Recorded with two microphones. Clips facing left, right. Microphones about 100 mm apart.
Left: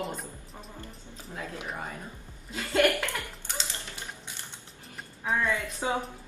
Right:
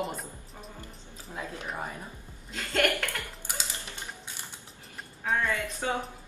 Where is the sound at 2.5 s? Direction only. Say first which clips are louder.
Left 3 dB; 10° left (ahead or behind).